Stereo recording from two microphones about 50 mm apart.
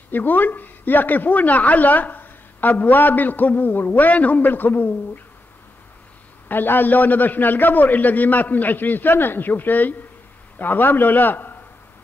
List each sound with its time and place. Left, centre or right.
0.1 s speech: left
6.5 s speech: left